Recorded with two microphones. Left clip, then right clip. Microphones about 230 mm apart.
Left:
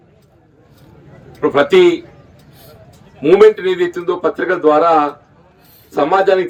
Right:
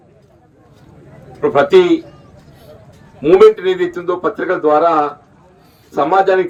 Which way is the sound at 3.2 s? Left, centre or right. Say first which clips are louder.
Right 1 dB; left.